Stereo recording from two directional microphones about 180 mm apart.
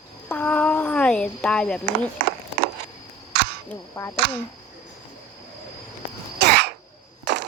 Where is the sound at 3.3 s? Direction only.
65° right (ahead or behind).